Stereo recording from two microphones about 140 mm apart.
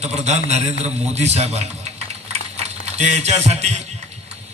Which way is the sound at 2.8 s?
55° right (ahead or behind).